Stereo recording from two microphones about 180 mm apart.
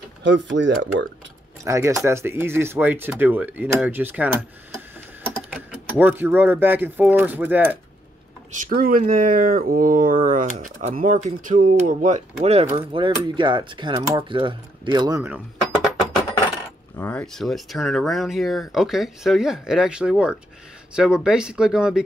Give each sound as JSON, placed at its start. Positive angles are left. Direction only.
{"t": 0.2, "sound": "speech", "side_deg": -90}
{"t": 1.6, "sound": "speech", "side_deg": -15}
{"t": 5.5, "sound": "speech", "side_deg": -10}
{"t": 8.5, "sound": "speech", "side_deg": -50}
{"t": 16.9, "sound": "speech", "side_deg": 10}